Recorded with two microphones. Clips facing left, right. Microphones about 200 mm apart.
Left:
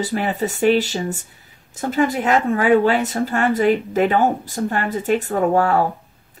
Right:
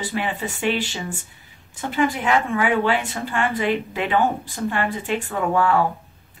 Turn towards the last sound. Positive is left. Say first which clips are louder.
# left 3 dB
turn(degrees=40)  # may be behind; listen again after turning